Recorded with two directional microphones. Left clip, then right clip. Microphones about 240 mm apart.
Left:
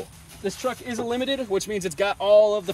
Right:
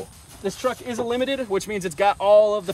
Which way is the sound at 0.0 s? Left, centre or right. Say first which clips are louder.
Right 1 dB; centre.